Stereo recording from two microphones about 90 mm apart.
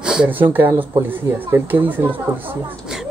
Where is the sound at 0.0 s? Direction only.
10° right (ahead or behind).